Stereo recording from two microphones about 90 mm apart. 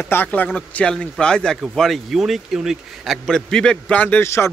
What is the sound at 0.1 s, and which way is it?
A man's voice, 20° left (ahead or behind).